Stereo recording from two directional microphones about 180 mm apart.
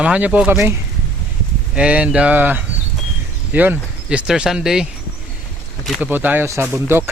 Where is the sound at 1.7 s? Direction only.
5° right (ahead or behind).